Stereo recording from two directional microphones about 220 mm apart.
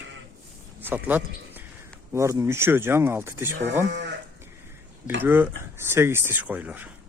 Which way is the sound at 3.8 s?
50° right (ahead or behind).